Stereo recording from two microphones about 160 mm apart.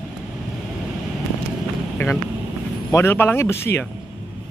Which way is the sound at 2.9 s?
15° left (ahead or behind).